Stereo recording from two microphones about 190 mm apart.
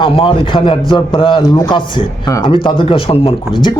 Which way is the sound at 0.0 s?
25° left (ahead or behind).